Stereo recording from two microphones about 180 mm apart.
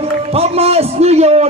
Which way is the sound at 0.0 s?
35° right (ahead or behind).